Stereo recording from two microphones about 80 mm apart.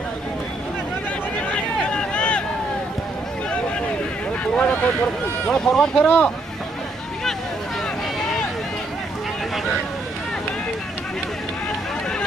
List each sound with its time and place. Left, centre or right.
1.5 s a sound: centre
4.6 s speech: centre
6.0 s speech: centre
8.2 s vehicle: centre